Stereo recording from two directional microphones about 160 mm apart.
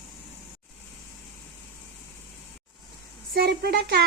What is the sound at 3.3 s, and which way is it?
Speech, 75° right (ahead or behind).